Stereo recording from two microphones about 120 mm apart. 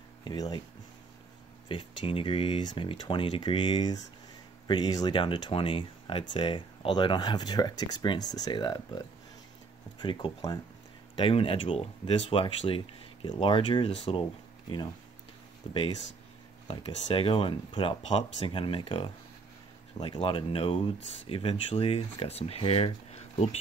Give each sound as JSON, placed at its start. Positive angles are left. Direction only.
{"t": 0.2, "sound": "speech", "side_deg": 35}
{"t": 1.7, "sound": "speech", "side_deg": 45}
{"t": 11.1, "sound": "speech", "side_deg": 50}
{"t": 15.7, "sound": "speech", "side_deg": 45}